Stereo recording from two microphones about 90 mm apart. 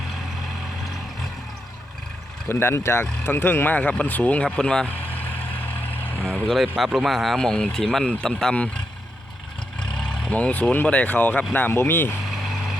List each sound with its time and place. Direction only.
2.5 s speech: 25° left (ahead or behind); by 4.9 s 10° left (ahead or behind)
4.9 s vehicle: 20° left (ahead or behind)
6.5 s speech: centre (ahead or behind); by 12.1 s 20° left (ahead or behind)
12.3 s vehicle: centre (ahead or behind)